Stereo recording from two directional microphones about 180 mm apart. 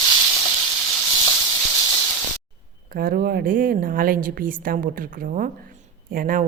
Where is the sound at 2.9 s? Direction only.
55° right (ahead or behind).